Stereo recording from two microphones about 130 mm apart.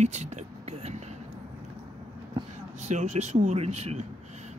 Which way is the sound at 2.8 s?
65° right (ahead or behind).